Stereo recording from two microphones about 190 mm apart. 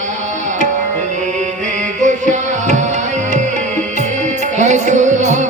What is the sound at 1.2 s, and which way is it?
Music, 40° right (ahead or behind).